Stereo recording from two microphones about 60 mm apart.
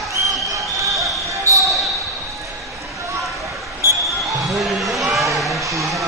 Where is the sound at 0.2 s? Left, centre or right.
Right.